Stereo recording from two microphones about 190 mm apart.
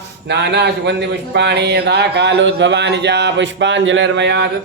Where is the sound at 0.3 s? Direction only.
65° right (ahead or behind).